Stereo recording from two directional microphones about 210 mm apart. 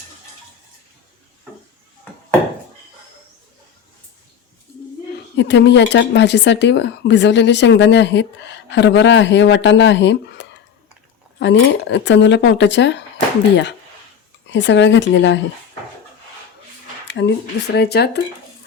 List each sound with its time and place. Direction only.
5.4 s speech: 55° left (ahead or behind)
14.5 s speech: 60° left (ahead or behind)
17.1 s speech: 55° left (ahead or behind)